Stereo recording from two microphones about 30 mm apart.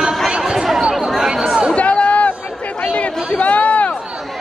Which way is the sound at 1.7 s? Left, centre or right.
Left.